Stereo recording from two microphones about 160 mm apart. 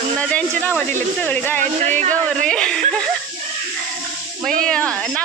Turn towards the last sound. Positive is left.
turn(degrees=5)  # may be behind; listen again after turning